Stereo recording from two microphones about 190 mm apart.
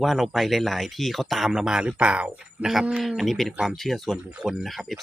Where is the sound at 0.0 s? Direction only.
Centre (ahead or behind).